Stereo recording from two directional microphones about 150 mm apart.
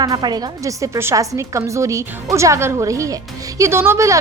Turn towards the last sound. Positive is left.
turn(degrees=-20)  # may be behind; listen again after turning